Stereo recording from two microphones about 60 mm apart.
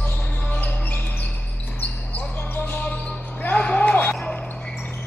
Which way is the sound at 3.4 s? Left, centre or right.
Left.